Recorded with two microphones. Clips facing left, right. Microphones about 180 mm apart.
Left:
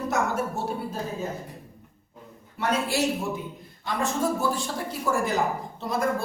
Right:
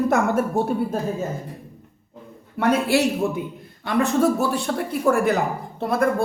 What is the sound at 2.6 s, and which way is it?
Speech, 60° right (ahead or behind).